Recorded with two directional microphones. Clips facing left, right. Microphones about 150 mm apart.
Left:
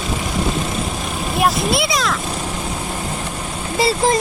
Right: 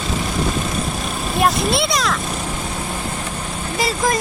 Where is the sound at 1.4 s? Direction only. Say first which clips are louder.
Even; centre (ahead or behind).